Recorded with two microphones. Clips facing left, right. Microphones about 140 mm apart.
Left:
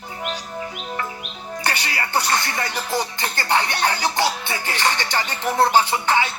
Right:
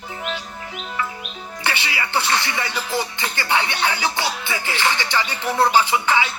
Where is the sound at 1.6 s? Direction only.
45° left (ahead or behind).